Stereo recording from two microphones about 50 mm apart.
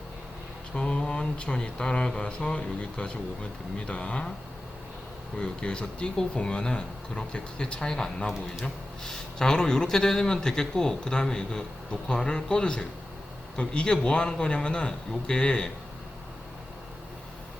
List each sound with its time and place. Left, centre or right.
0.7 s speech: centre
5.4 s speech: centre